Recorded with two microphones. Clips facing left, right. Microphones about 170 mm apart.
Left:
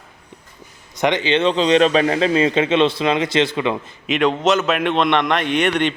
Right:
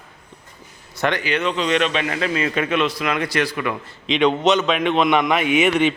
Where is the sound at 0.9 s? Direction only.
20° left (ahead or behind).